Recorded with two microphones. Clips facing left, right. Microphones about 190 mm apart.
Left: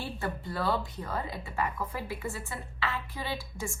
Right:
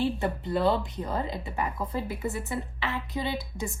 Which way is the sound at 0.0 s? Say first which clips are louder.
Right 8 dB; 20° right (ahead or behind).